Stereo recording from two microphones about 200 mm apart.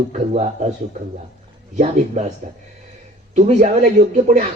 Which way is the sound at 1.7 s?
40° right (ahead or behind).